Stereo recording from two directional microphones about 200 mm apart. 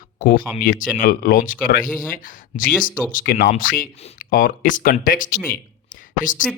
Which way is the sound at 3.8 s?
30° left (ahead or behind).